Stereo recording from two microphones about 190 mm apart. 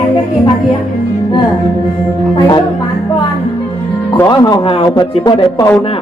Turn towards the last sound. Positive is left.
turn(degrees=20)  # may be behind; listen again after turning